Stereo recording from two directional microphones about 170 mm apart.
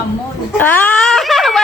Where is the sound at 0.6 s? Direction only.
10° left (ahead or behind).